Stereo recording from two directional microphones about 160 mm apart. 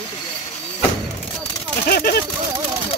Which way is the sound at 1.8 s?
75° left (ahead or behind).